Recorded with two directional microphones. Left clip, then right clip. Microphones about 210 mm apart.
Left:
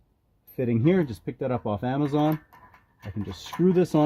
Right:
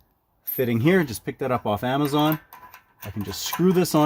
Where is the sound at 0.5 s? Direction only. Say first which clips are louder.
Right 3 dB; 15° right (ahead or behind).